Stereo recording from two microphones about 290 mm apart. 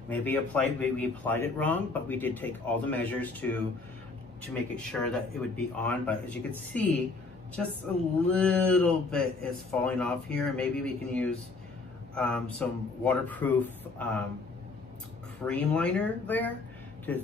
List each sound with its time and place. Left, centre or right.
0.1 s speech: centre
15.4 s speech: centre